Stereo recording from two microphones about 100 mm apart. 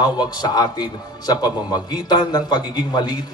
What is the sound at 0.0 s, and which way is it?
A man's voice, 40° left (ahead or behind).